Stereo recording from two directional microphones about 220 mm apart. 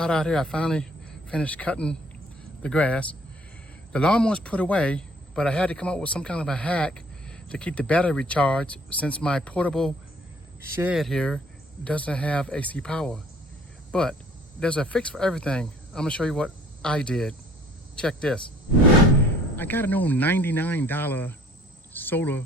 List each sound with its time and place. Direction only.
0.0 s a man's voice: 5° left (ahead or behind)
19.5 s speech: 10° left (ahead or behind)